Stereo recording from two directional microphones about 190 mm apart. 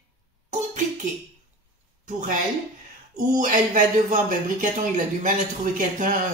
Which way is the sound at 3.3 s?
45° right (ahead or behind).